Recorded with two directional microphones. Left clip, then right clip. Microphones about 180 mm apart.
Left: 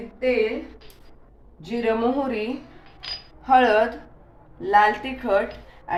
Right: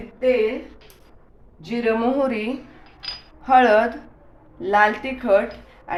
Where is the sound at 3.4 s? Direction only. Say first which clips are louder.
Right 2 dB; 25° right (ahead or behind).